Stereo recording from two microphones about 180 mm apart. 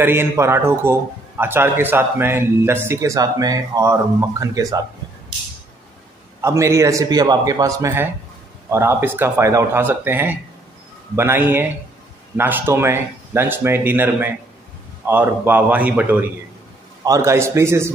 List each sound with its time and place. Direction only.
0.0 s a man's voice: 15° right (ahead or behind)
6.4 s a man's voice: 15° right (ahead or behind)